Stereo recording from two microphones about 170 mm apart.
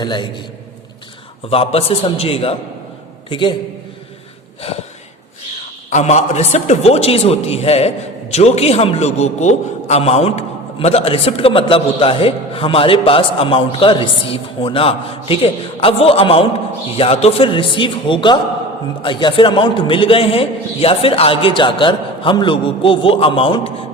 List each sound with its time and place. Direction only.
0.0 s a man's voice: 25° left (ahead or behind)
1.5 s a man's voice: 35° left (ahead or behind)
5.9 s a man's voice: 45° left (ahead or behind)